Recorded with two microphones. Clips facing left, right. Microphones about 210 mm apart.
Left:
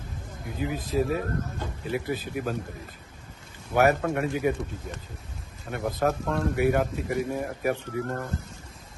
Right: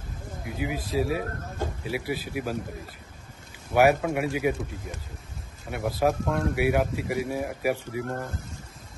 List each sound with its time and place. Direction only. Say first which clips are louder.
0.6 s speech: left 1 dB; 10° right (ahead or behind)
3.7 s speech: right 1 dB; 10° right (ahead or behind)